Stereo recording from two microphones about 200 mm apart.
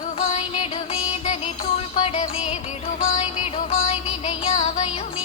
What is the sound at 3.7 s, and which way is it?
Music, 30° left (ahead or behind).